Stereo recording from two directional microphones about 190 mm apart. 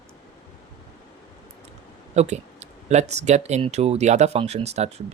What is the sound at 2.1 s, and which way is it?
Speech, 35° right (ahead or behind).